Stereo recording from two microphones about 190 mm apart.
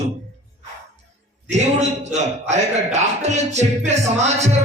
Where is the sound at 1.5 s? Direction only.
35° right (ahead or behind).